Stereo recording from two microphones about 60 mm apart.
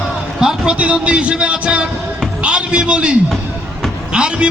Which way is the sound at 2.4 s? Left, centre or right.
Centre.